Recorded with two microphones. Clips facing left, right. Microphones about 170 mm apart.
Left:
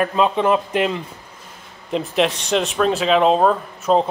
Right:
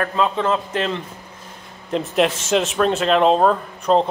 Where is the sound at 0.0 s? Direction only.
15° left (ahead or behind).